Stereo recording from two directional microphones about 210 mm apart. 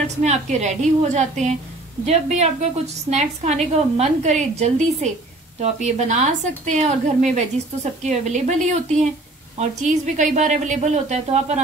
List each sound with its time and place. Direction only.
0.0 s a woman's voice: 30° right (ahead or behind)